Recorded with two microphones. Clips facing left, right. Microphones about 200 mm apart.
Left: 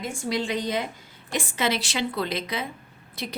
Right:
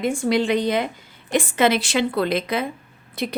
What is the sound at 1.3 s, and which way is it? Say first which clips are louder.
A woman's voice: right 8 dB; 55° right (ahead or behind).